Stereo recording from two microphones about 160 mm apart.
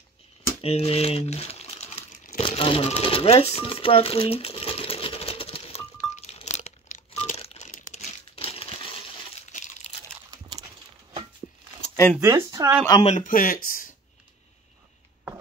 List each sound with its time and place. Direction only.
0.6 s crumpling: 40° left (ahead or behind)
2.4 s sewing machine: 35° left (ahead or behind)
7.7 s crumpling: 50° left (ahead or behind); by 8.9 s 35° left (ahead or behind)
9.5 s crumpling: 50° left (ahead or behind)
12.2 s speech: 20° right (ahead or behind)
13.0 s speech: 50° left (ahead or behind)